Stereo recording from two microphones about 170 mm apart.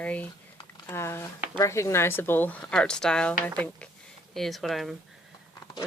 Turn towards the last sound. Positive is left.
turn(degrees=20)  # may be behind; listen again after turning